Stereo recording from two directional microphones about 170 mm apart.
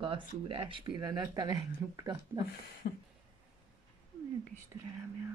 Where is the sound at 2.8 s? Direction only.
60° left (ahead or behind).